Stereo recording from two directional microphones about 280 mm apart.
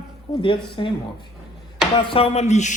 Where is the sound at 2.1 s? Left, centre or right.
Left.